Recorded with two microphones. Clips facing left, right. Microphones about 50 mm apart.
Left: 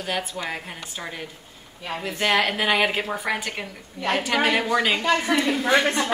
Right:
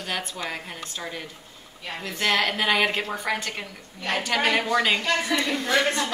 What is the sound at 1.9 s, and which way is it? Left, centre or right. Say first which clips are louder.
Speech: left 2 dB; centre.